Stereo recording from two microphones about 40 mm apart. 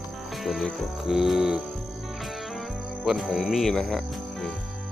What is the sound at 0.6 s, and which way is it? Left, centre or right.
Music, centre.